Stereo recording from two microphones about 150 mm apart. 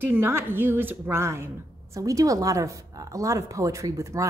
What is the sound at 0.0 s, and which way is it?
Speech, 15° right (ahead or behind).